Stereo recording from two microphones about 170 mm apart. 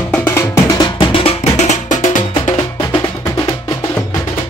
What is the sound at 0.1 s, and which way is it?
Music, 10° left (ahead or behind).